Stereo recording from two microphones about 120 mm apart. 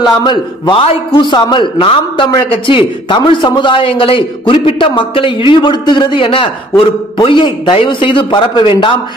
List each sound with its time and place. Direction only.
0.2 s a man's voice: 40° left (ahead or behind)